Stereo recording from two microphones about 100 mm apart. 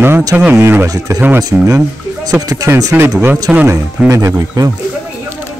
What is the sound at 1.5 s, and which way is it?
Speech, 10° right (ahead or behind).